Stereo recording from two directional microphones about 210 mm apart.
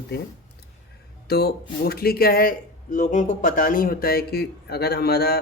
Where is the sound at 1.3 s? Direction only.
45° left (ahead or behind).